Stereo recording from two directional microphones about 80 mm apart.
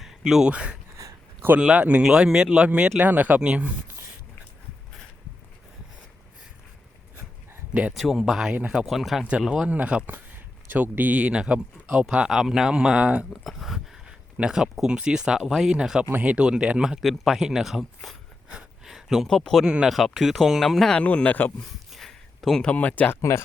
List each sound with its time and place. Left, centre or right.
0.0 s a sound: centre
0.5 s speech: centre
1.4 s speech: right
7.7 s speech: centre
7.9 s speech: centre
9.5 s speech: centre
13.3 s speech: centre
18.9 s a sound: centre
19.3 s speech: centre
19.6 s speech: centre
21.0 s speech: centre
21.9 s a sound: centre
22.6 s speech: centre